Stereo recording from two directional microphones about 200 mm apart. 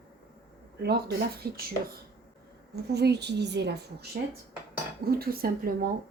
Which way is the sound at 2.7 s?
55° right (ahead or behind).